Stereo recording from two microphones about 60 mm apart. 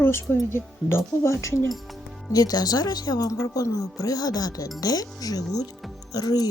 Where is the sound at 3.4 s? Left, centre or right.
Left.